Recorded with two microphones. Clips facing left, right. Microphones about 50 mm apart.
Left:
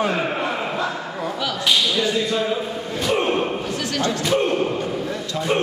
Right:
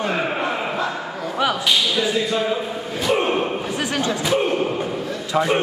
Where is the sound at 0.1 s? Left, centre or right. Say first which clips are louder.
Right 1 dB; centre.